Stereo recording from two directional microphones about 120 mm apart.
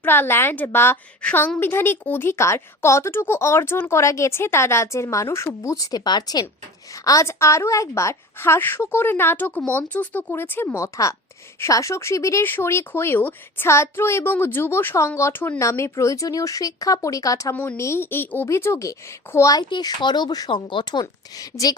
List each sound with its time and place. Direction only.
0.0 s speech: 20° left (ahead or behind)
17.5 s speech: 15° left (ahead or behind)
19.7 s speech: 40° left (ahead or behind)